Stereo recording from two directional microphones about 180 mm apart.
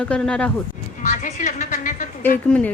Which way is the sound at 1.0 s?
45° left (ahead or behind).